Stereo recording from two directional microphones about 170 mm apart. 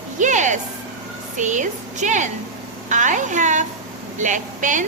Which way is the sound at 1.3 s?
45° right (ahead or behind).